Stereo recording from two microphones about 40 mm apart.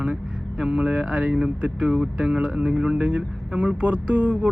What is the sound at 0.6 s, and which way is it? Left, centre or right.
Speech, right.